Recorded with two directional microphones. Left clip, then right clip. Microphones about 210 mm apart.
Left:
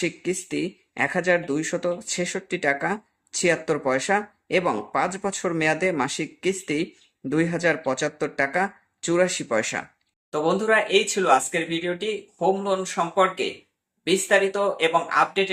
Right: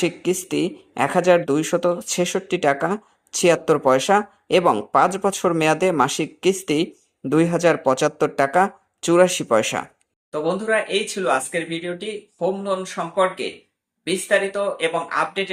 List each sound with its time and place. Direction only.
0.0 s speech: 20° right (ahead or behind)
10.3 s speech: 5° left (ahead or behind)